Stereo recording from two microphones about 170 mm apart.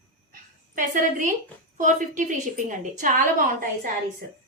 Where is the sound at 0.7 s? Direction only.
50° right (ahead or behind).